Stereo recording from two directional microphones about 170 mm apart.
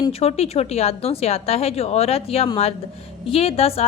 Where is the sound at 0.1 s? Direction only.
35° left (ahead or behind).